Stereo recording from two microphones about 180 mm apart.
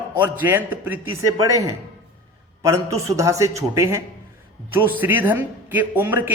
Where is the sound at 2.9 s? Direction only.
15° right (ahead or behind).